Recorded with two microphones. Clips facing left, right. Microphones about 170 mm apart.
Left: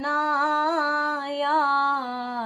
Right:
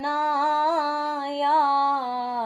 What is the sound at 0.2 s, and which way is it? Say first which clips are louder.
Music: right 2 dB; 25° right (ahead or behind).